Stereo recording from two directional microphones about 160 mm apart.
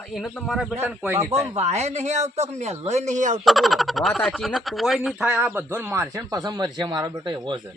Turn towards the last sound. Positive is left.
turn(degrees=-30)  # may be behind; listen again after turning